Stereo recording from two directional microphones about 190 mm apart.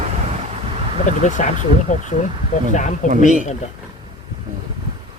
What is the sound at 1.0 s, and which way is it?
Speech, 40° left (ahead or behind).